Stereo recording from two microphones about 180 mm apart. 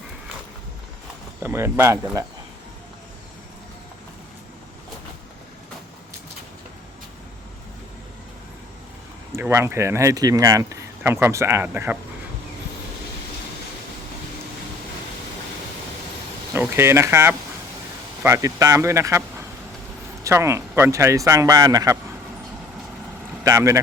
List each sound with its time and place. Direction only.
1.4 s speech: 10° right (ahead or behind)
9.3 s speech: 15° right (ahead or behind)
16.6 s speech: 15° right (ahead or behind)
20.2 s speech: 15° right (ahead or behind)
23.4 s speech: 15° right (ahead or behind)